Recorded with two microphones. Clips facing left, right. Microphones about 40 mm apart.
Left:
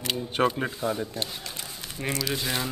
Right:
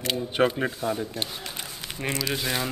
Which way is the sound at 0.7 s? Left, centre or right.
Centre.